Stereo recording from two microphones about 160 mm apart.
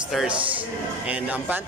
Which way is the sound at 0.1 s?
Centre (ahead or behind).